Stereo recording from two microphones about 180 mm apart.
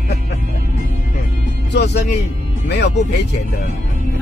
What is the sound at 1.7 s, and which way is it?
Music, 70° left (ahead or behind).